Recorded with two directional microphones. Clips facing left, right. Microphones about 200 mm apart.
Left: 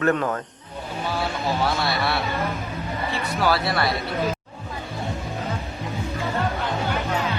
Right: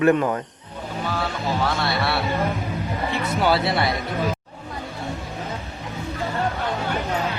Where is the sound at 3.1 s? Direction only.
25° right (ahead or behind).